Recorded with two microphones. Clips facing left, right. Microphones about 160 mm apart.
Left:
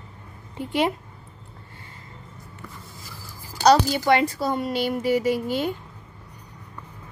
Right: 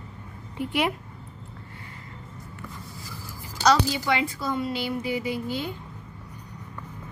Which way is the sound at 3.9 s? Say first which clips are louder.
Left 6 dB; 50° left (ahead or behind).